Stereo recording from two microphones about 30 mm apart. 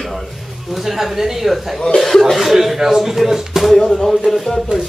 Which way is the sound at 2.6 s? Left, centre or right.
Centre.